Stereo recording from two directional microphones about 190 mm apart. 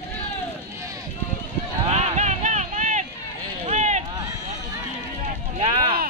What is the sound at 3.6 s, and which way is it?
Run, 35° right (ahead or behind).